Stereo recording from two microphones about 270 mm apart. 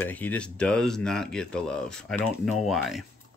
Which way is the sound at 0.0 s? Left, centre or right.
Centre.